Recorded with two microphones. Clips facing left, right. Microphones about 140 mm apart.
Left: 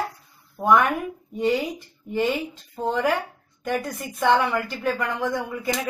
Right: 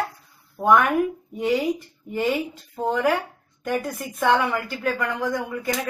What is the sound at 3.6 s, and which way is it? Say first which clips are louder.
A woman's voice: right 1 dB; centre (ahead or behind).